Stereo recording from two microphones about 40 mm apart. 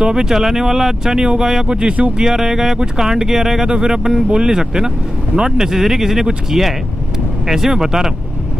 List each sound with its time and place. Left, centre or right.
0.0 s speech: centre
5.7 s speech: centre